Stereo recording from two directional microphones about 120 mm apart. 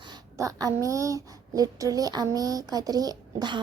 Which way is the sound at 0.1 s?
30° right (ahead or behind).